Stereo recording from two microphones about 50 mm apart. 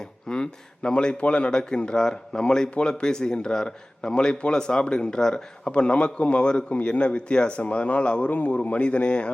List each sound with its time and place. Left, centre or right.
0.3 s a man's voice: centre